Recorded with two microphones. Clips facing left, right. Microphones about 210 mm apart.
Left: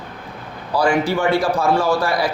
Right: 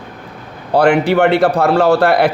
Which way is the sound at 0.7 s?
65° right (ahead or behind).